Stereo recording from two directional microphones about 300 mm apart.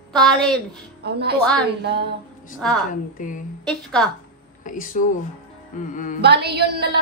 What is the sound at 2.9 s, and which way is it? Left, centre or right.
Speech, left.